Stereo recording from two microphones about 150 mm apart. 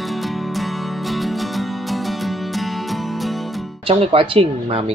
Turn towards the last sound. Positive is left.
turn(degrees=-40)  # may be behind; listen again after turning